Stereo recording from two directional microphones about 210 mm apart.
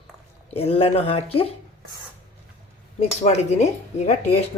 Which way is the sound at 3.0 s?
30° left (ahead or behind).